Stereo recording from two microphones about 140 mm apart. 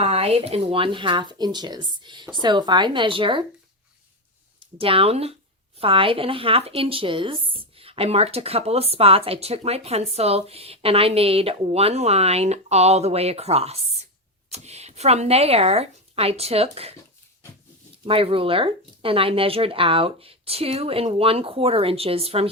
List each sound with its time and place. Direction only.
0.0 s speech: 45° right (ahead or behind)
4.8 s speech: 40° right (ahead or behind)
18.0 s speech: 40° right (ahead or behind)